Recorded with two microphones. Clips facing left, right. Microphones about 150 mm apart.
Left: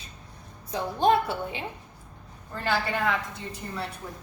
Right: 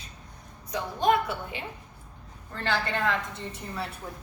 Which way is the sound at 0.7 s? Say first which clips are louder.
Left 2 dB; 30° left (ahead or behind).